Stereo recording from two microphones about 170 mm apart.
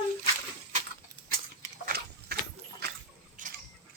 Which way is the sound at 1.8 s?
65° right (ahead or behind).